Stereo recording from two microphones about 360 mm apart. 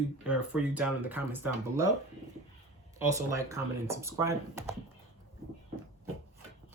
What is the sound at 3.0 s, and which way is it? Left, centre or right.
Speech, centre.